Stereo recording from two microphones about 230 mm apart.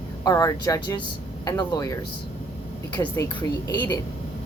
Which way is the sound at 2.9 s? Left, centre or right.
Centre.